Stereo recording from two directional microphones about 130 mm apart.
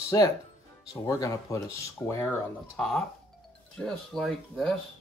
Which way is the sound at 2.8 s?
Centre (ahead or behind).